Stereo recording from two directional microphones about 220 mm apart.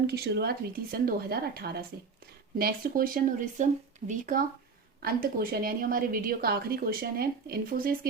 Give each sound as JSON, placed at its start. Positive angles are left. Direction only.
{"t": 0.1, "sound": "a woman's voice", "side_deg": -45}